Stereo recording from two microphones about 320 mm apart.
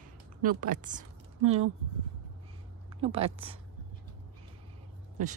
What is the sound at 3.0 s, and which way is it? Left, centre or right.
Speech, centre.